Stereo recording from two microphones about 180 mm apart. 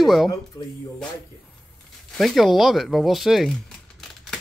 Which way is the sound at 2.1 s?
Centre (ahead or behind).